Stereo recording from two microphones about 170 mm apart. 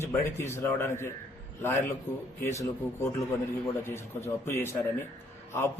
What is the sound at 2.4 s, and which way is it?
A man's voice, 15° left (ahead or behind).